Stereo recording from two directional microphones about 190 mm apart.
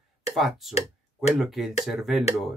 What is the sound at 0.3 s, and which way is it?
Speech, centre (ahead or behind).